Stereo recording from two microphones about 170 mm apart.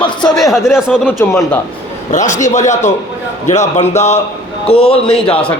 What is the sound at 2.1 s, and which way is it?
A man's voice, 45° left (ahead or behind).